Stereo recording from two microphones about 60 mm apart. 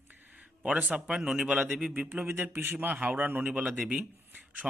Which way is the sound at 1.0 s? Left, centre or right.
Centre.